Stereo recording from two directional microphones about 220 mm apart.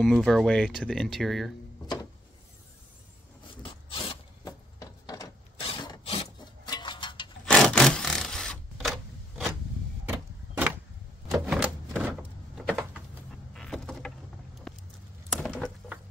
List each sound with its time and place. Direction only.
0.0 s speech: centre (ahead or behind)
3.6 s mechanisms: 25° left (ahead or behind)
7.4 s wood: centre (ahead or behind)
10.0 s a sound: 5° right (ahead or behind)
11.2 s door: centre (ahead or behind)
13.5 s vehicle: centre (ahead or behind)
15.3 s patter: centre (ahead or behind)